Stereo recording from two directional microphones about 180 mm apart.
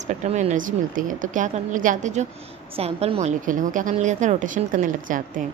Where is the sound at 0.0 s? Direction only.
40° right (ahead or behind).